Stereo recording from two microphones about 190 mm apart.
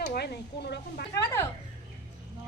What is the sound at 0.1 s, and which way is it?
Speech, 60° left (ahead or behind).